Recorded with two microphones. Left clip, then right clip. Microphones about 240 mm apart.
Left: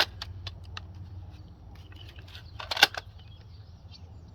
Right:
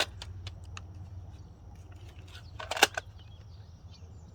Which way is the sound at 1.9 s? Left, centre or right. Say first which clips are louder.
Left 5 dB; centre.